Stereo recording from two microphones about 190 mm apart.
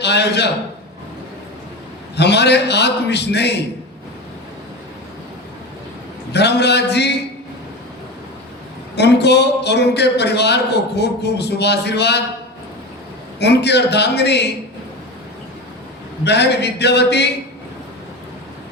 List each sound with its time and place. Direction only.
0.0 s a man's voice: 60° left (ahead or behind)
2.1 s a man's voice: 60° left (ahead or behind)
6.3 s a man's voice: 60° left (ahead or behind)
9.0 s a man's voice: 60° left (ahead or behind)
13.4 s a man's voice: 60° left (ahead or behind)
16.2 s a man's voice: 60° left (ahead or behind)